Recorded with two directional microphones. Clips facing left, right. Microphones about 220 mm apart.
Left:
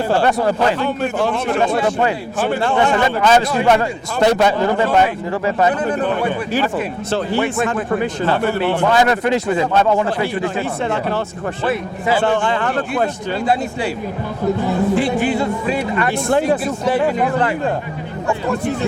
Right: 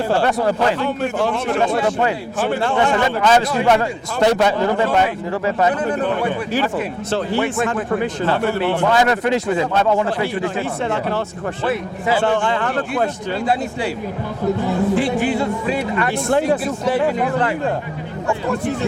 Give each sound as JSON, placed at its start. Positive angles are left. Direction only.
{"t": 0.1, "sound": "a man's voice", "side_deg": 25}